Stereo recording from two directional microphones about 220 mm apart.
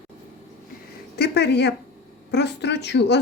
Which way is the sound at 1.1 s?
50° left (ahead or behind).